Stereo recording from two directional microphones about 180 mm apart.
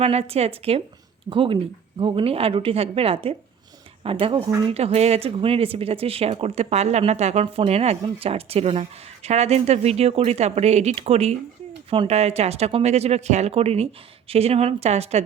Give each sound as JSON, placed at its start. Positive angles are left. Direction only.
{"t": 0.0, "sound": "speech", "side_deg": -35}